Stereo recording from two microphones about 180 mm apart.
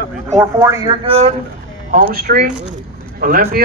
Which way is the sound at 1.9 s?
50° right (ahead or behind).